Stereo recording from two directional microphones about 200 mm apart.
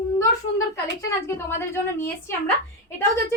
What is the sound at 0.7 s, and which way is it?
A woman's voice, 10° left (ahead or behind).